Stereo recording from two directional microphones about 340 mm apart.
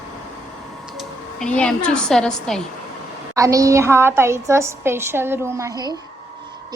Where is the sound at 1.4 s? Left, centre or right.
Centre.